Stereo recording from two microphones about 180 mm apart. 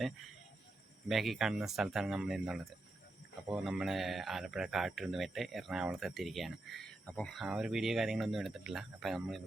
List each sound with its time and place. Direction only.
1.0 s speech: centre (ahead or behind)